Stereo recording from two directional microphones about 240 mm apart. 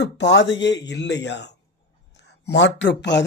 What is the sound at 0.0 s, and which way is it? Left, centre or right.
Speech, left.